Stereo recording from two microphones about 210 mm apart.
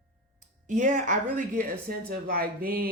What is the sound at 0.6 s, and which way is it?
Speech, 35° right (ahead or behind).